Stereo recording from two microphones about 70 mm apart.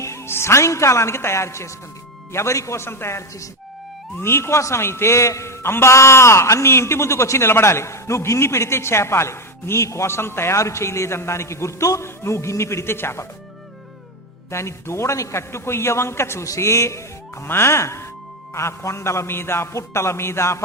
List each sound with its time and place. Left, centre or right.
0.0 s a man's voice: left
14.5 s a man's voice: left